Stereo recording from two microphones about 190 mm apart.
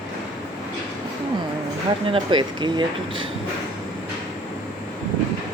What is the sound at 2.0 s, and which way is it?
Speech, 25° right (ahead or behind).